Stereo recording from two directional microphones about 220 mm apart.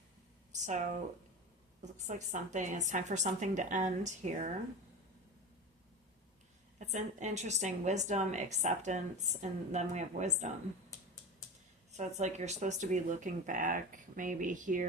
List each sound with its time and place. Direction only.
0.6 s a woman's voice: 35° right (ahead or behind)
6.7 s a woman's voice: 35° right (ahead or behind)
11.9 s a woman's voice: 30° right (ahead or behind)